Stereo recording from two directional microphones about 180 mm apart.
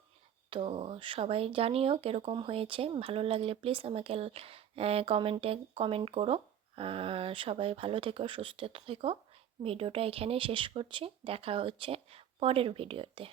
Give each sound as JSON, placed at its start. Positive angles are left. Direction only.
{"t": 0.5, "sound": "speech", "side_deg": -30}